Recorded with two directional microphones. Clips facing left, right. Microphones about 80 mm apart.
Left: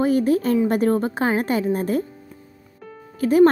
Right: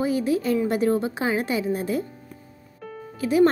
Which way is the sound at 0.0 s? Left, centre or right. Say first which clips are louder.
Left 4 dB; left.